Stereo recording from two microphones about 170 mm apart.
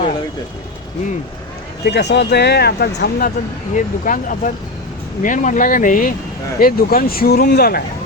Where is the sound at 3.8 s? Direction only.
50° left (ahead or behind); by 7.8 s 65° left (ahead or behind).